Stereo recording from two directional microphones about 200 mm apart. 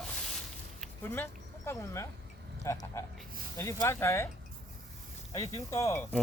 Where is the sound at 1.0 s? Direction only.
10° left (ahead or behind).